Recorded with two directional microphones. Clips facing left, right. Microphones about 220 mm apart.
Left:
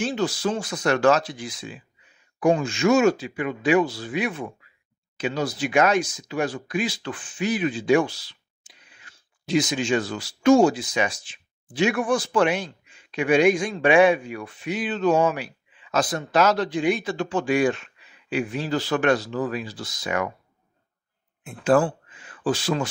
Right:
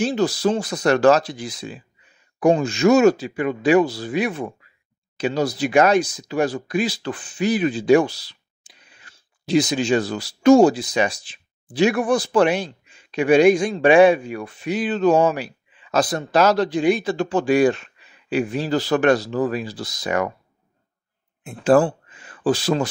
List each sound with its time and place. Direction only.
0.0 s speech: 40° right (ahead or behind)
21.6 s speech: 40° right (ahead or behind)